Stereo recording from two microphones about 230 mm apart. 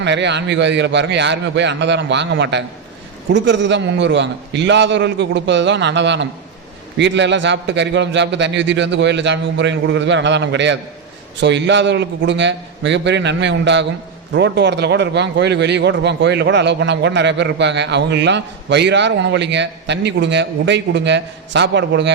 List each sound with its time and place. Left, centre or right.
0.0 s a man's voice: right